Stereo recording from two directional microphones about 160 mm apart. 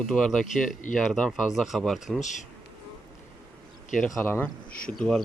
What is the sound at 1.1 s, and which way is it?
Speech, centre (ahead or behind).